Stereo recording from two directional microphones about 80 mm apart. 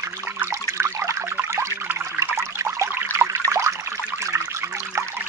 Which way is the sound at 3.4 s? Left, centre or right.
Right.